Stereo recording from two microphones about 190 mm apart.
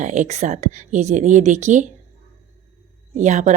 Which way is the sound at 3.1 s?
40° right (ahead or behind).